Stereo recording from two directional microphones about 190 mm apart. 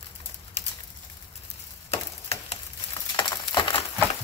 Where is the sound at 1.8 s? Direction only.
35° left (ahead or behind).